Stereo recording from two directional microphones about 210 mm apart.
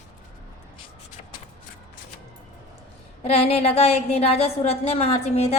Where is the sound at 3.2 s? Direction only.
30° left (ahead or behind).